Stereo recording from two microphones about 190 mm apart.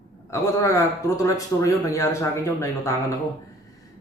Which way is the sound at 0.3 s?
15° left (ahead or behind).